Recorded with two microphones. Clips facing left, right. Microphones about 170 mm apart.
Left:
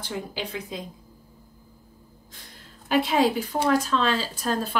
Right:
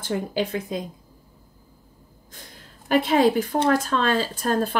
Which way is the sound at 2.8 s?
50° right (ahead or behind).